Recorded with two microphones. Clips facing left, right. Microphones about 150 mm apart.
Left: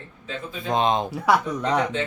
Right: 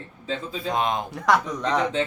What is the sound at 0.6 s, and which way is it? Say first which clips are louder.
Speech: left 4 dB; 25° left (ahead or behind).